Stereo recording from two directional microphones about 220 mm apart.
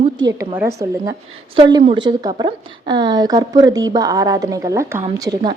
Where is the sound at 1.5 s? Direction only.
25° right (ahead or behind).